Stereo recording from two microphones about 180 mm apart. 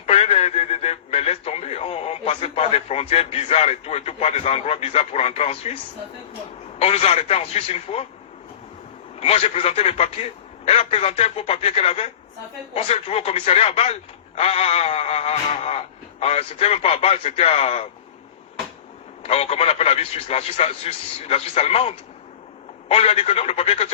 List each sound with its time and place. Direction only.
0.0 s radio: 35° left (ahead or behind)
6.7 s speech: 35° left (ahead or behind)
9.2 s speech: 35° left (ahead or behind)
19.2 s speech: 35° left (ahead or behind)